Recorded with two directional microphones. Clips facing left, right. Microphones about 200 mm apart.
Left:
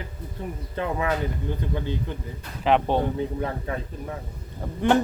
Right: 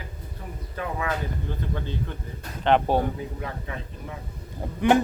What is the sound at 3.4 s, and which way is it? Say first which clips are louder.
Speech: left 6 dB; 35° left (ahead or behind).